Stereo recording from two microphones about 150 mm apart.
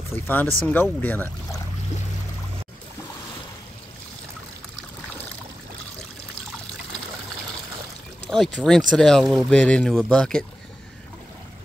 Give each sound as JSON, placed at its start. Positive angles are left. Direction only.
{"t": 0.1, "sound": "speech", "side_deg": 15}
{"t": 8.3, "sound": "speech", "side_deg": 5}